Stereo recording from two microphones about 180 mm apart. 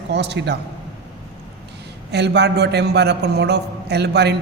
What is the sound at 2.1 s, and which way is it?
A man's voice, 70° right (ahead or behind).